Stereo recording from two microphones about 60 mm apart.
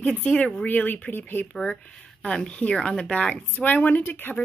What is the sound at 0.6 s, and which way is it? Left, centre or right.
Speech, left.